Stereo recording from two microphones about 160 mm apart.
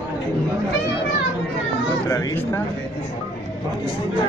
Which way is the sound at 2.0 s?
15° left (ahead or behind).